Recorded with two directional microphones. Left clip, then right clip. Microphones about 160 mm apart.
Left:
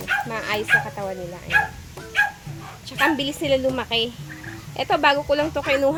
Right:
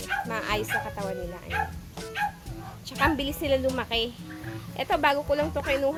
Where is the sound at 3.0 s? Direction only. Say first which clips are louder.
Left 5 dB; centre (ahead or behind).